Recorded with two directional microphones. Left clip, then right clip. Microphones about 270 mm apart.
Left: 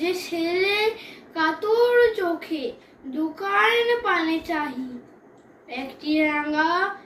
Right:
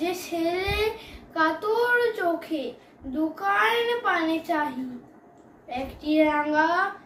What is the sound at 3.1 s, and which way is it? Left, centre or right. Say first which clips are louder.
A child's voice: left 1 dB; centre.